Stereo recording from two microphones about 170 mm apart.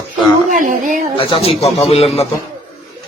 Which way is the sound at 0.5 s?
50° right (ahead or behind).